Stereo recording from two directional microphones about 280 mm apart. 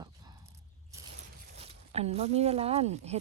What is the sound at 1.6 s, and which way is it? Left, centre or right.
Speech, right.